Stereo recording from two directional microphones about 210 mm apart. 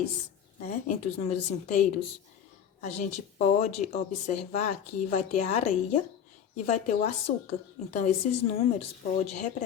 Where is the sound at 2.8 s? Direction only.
35° left (ahead or behind).